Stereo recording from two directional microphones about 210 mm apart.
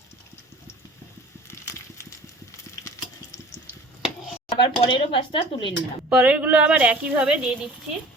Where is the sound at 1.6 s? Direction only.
15° left (ahead or behind).